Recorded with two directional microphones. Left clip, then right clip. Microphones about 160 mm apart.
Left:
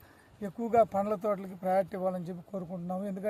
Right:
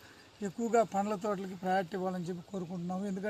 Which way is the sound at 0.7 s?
35° left (ahead or behind).